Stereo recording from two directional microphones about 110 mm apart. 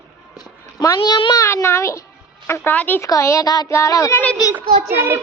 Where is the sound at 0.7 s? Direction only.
35° left (ahead or behind); by 3.0 s 15° left (ahead or behind).